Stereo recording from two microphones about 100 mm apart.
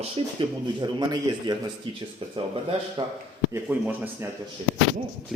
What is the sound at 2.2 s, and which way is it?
Speech, 65° right (ahead or behind).